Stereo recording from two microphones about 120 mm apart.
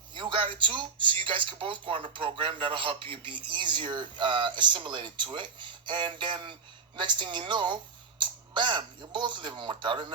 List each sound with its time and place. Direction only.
0.1 s speech: 45° right (ahead or behind)